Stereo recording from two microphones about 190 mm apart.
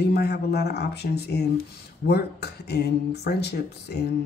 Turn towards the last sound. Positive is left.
turn(degrees=60)  # may be behind; listen again after turning